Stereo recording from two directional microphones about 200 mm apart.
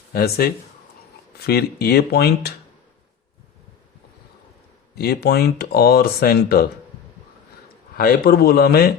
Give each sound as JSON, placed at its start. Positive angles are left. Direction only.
{"t": 0.1, "sound": "speech", "side_deg": 50}
{"t": 4.9, "sound": "speech", "side_deg": 50}
{"t": 7.9, "sound": "speech", "side_deg": 50}